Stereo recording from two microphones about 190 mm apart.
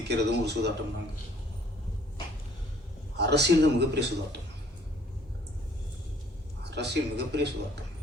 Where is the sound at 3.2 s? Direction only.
60° right (ahead or behind).